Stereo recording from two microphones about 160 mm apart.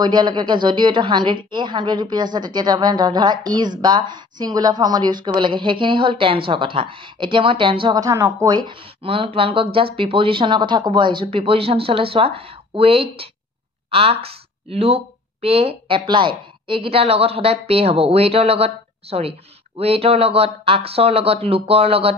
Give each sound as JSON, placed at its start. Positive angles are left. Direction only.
{"t": 0.0, "sound": "a woman's voice", "side_deg": -25}